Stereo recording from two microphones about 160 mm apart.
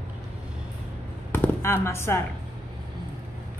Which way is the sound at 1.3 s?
15° left (ahead or behind).